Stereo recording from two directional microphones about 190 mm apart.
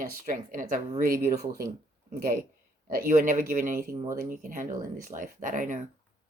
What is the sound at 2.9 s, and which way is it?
Speech, 45° right (ahead or behind).